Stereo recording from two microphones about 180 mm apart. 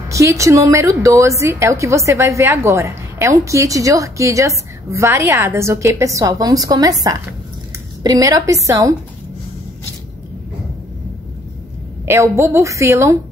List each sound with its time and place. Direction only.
0.1 s a woman's voice: 15° right (ahead or behind)
12.1 s a woman's voice: 15° right (ahead or behind)